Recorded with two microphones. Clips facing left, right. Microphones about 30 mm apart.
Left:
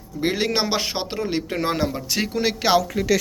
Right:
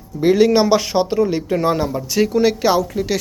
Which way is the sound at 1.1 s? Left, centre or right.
Left.